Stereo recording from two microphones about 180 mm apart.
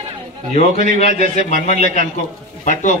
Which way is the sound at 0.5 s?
35° left (ahead or behind).